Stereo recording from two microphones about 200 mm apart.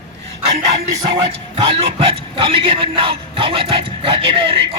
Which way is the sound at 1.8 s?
30° right (ahead or behind).